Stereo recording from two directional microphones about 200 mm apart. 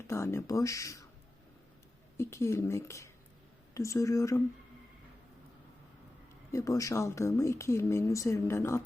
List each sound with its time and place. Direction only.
0.1 s speech: 15° left (ahead or behind)
2.1 s speech: 15° left (ahead or behind)
6.5 s speech: 15° left (ahead or behind)